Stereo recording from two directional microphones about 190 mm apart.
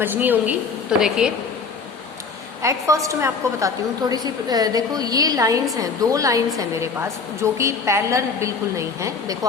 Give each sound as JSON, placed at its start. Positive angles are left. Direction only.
{"t": 0.0, "sound": "a woman's voice", "side_deg": -10}
{"t": 2.6, "sound": "a woman's voice", "side_deg": -15}